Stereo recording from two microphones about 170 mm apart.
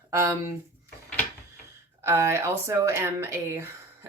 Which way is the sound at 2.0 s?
15° right (ahead or behind).